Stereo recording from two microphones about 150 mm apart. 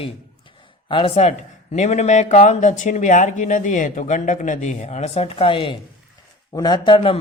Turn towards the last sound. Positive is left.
turn(degrees=35)  # may be behind; listen again after turning